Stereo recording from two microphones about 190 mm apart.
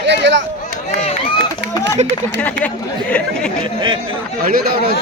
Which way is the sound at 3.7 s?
25° right (ahead or behind).